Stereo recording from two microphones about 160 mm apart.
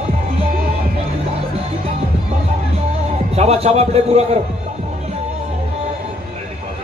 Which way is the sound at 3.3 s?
40° right (ahead or behind).